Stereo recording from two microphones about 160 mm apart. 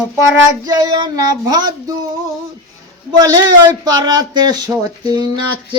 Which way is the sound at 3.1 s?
25° right (ahead or behind).